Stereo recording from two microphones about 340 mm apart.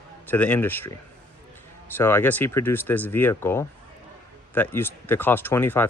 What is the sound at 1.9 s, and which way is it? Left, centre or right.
Speech, centre.